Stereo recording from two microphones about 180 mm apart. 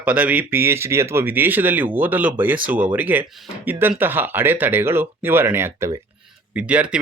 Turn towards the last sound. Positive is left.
turn(degrees=-5)  # may be behind; listen again after turning